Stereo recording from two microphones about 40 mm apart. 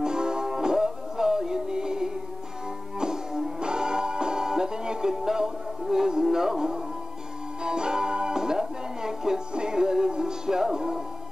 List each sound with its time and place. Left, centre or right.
0.0 s music: centre